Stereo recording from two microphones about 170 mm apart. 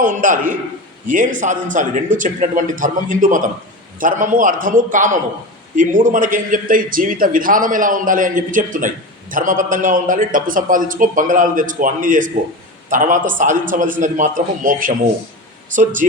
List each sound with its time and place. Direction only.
0.0 s speech: 50° right (ahead or behind)